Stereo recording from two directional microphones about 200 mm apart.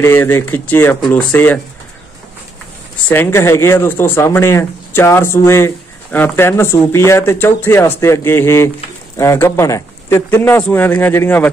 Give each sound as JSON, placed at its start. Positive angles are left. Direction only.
{"t": 0.0, "sound": "speech", "side_deg": 10}
{"t": 3.1, "sound": "speech", "side_deg": 10}